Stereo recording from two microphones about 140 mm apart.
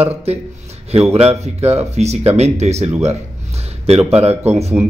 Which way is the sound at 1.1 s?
45° right (ahead or behind).